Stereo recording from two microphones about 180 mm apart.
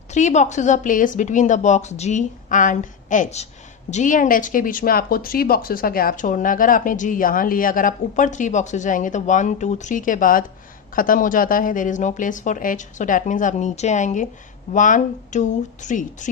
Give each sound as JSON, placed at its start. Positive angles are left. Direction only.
{"t": 0.1, "sound": "a woman's voice", "side_deg": 40}